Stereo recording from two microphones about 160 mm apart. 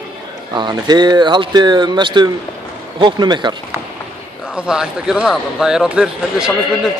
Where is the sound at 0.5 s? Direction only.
25° right (ahead or behind).